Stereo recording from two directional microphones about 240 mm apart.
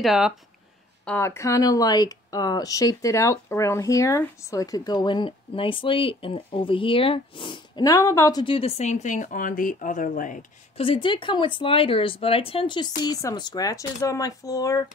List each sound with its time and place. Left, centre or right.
0.0 s speech: centre
1.0 s speech: centre